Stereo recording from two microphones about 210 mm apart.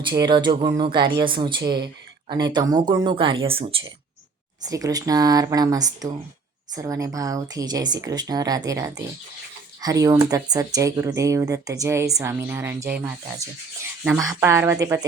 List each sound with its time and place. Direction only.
0.1 s speech: 20° right (ahead or behind)
14.0 s speech: 10° right (ahead or behind)